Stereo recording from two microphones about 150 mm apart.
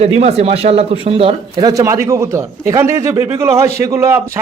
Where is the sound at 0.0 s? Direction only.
45° right (ahead or behind).